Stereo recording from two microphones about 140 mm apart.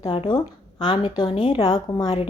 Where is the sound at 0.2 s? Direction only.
35° left (ahead or behind).